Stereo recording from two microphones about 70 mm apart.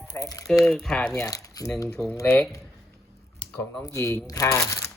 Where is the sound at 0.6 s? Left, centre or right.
Centre.